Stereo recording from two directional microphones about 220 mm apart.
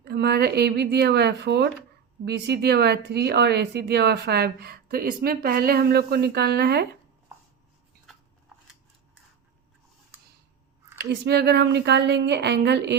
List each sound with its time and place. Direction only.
0.0 s speech: 45° right (ahead or behind)
10.9 s speech: 50° right (ahead or behind)